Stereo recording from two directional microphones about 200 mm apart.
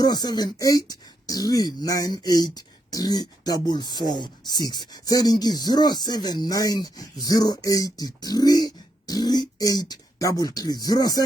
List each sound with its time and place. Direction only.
0.0 s speech: 20° left (ahead or behind)